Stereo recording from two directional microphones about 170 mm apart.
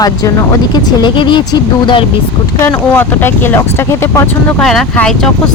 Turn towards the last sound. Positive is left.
turn(degrees=5)  # may be behind; listen again after turning